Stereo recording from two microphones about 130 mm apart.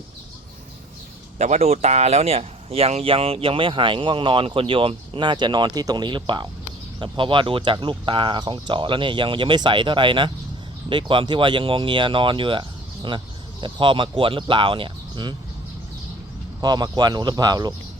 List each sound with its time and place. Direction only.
1.4 s speech: 55° right (ahead or behind); by 15.4 s 35° right (ahead or behind)
16.6 s speech: 30° right (ahead or behind)